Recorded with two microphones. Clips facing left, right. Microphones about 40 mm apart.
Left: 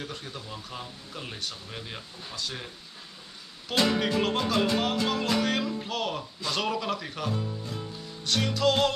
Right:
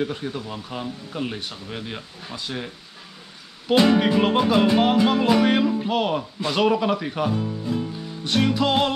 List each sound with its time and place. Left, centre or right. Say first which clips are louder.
0.0 s music: right 11 dB; right